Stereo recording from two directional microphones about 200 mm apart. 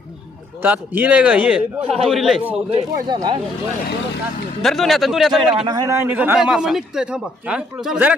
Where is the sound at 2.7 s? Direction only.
20° right (ahead or behind).